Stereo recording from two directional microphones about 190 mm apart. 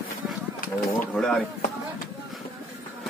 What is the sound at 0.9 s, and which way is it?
Speech, 5° left (ahead or behind).